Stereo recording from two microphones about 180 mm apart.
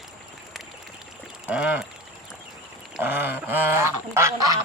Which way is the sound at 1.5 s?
5° right (ahead or behind).